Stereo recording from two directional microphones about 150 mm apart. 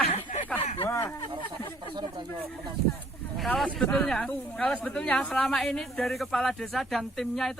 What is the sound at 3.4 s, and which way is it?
Speech, 5° left (ahead or behind).